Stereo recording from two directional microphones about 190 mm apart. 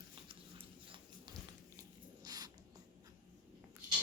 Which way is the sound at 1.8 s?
20° right (ahead or behind).